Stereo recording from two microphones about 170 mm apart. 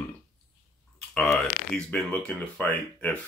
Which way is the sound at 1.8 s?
5° left (ahead or behind).